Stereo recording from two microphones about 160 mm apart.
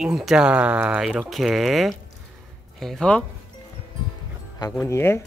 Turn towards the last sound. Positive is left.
turn(degrees=15)  # may be behind; listen again after turning